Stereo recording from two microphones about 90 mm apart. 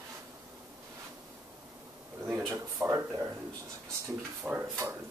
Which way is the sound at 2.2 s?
30° right (ahead or behind).